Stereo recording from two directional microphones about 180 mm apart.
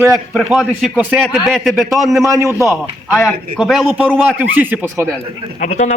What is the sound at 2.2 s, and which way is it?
Speech, 15° right (ahead or behind).